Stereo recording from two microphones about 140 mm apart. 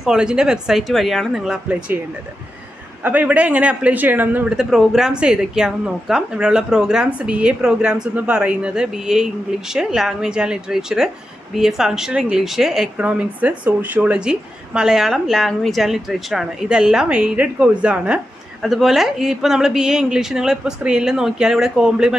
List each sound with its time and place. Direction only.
0.0 s speech: 5° right (ahead or behind)
3.0 s speech: 10° right (ahead or behind)